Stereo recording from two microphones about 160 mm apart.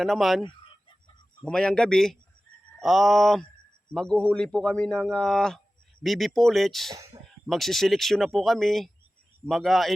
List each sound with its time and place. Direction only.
0.0 s a man's voice: centre (ahead or behind)
0.4 s chicken: 30° left (ahead or behind)
1.5 s a man's voice: 5° left (ahead or behind)